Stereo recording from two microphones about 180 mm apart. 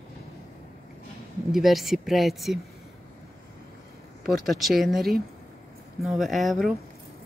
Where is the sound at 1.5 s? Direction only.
Centre (ahead or behind).